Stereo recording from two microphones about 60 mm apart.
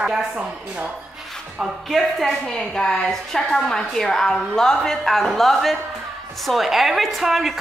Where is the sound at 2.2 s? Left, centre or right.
Centre.